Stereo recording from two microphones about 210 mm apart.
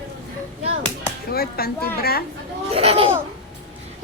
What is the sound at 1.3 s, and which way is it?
Speech, 45° left (ahead or behind).